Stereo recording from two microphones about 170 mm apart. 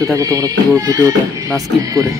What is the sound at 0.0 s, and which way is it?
Speech, 20° right (ahead or behind).